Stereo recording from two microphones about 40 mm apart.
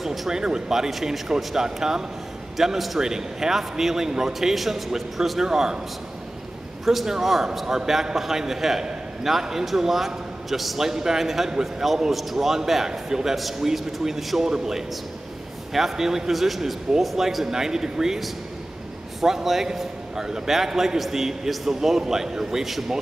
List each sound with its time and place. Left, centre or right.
0.0 s speech: centre
0.3 s a man's voice: centre
5.5 s a man's voice: centre
6.9 s a man's voice: centre
17.5 s a man's voice: centre
19.2 s a man's voice: centre